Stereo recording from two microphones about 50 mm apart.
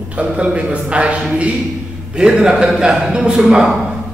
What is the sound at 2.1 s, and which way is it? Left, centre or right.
A man's voice, centre.